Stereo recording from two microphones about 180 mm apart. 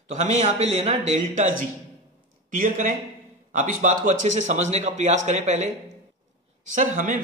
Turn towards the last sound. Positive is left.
turn(degrees=-45)  # may be behind; listen again after turning